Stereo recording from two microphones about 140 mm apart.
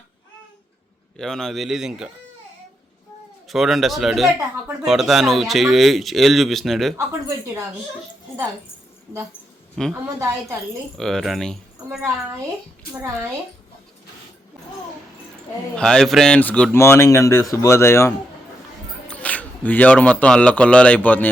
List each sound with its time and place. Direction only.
1.1 s speech: 5° left (ahead or behind)
3.5 s speech: centre (ahead or behind)
6.9 s speech: 20° right (ahead or behind)
9.9 s speech: 20° right (ahead or behind)
10.9 s speech: centre (ahead or behind)
15.7 s speech: 5° left (ahead or behind)